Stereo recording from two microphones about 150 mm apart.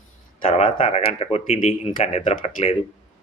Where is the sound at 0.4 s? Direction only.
40° left (ahead or behind).